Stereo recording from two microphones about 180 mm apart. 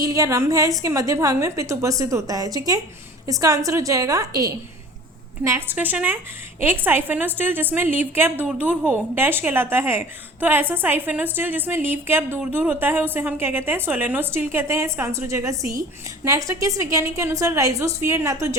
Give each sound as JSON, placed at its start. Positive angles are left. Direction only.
{"t": 0.0, "sound": "a woman's voice", "side_deg": -20}